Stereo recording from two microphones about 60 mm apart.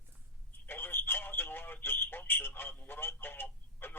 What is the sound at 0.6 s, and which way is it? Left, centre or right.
Speech, left.